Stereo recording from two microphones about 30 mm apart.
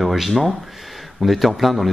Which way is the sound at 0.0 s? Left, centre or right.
Centre.